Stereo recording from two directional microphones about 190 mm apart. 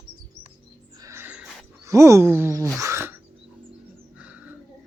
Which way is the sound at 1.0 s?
15° right (ahead or behind).